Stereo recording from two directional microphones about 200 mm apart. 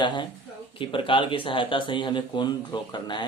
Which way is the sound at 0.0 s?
25° left (ahead or behind).